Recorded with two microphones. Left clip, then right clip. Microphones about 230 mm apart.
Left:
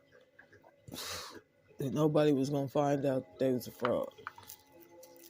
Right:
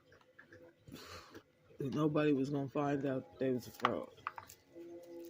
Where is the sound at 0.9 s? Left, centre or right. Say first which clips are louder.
Left 10 dB; left.